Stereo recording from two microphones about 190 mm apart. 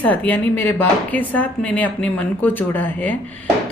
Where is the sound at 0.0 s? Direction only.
10° left (ahead or behind).